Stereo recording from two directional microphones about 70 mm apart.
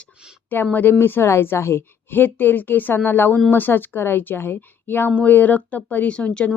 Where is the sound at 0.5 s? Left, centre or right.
Left.